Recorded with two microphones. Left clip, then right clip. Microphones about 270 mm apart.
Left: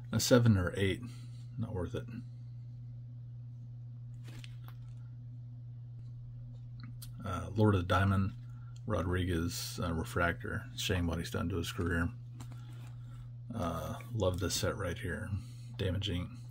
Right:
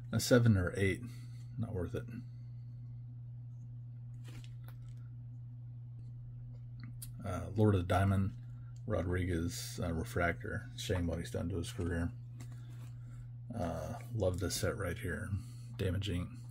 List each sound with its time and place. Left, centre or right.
0.1 s speech: centre
7.2 s speech: centre
13.5 s speech: centre